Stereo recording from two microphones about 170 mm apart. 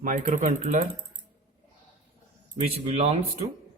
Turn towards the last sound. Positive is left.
turn(degrees=-40)  # may be behind; listen again after turning